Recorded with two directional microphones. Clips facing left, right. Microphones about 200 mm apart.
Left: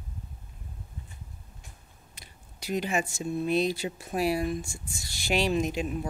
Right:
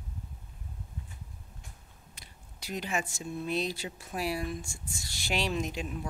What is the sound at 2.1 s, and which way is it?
Speech, 10° left (ahead or behind).